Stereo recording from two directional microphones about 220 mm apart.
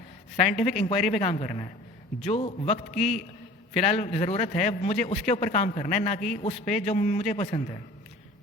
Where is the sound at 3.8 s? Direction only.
30° left (ahead or behind).